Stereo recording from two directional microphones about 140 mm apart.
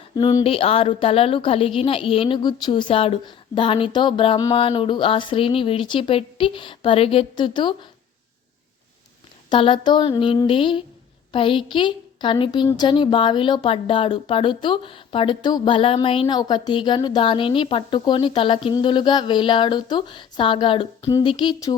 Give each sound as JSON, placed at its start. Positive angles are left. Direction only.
{"t": 0.2, "sound": "a sound", "side_deg": 30}
{"t": 0.4, "sound": "a woman's voice", "side_deg": 40}
{"t": 9.5, "sound": "a woman's voice", "side_deg": 35}